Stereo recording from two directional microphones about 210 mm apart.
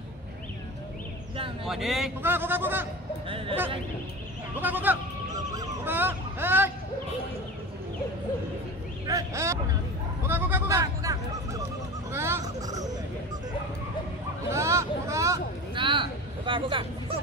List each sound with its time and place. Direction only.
1.7 s speech: centre (ahead or behind)
3.3 s speech: 25° right (ahead or behind)
4.6 s speech: 10° right (ahead or behind)
9.0 s speech: 15° right (ahead or behind)
14.5 s vehicle: 15° right (ahead or behind)